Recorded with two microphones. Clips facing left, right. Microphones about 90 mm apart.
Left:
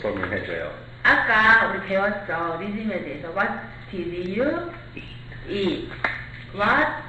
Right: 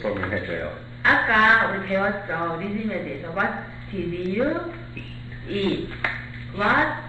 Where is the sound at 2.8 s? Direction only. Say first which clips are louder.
Even; 20° left (ahead or behind).